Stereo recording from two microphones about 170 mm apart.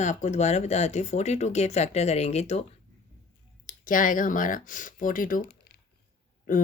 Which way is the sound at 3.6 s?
50° left (ahead or behind).